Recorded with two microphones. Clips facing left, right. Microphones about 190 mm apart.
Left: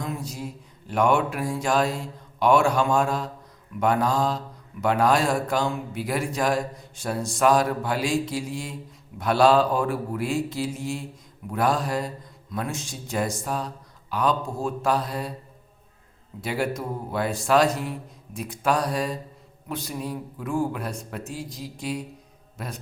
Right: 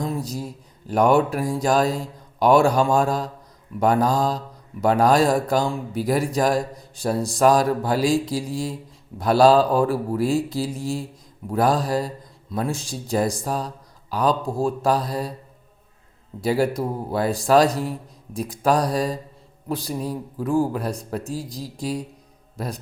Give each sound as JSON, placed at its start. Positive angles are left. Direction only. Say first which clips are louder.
{"t": 0.0, "sound": "mantra", "louder": "right 5 dB", "side_deg": -35}
{"t": 3.8, "sound": "a man's voice", "louder": "right 3 dB", "side_deg": -35}
{"t": 16.4, "sound": "a man's voice", "louder": "right 6 dB", "side_deg": -35}